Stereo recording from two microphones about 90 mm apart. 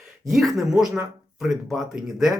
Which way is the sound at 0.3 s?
Centre (ahead or behind).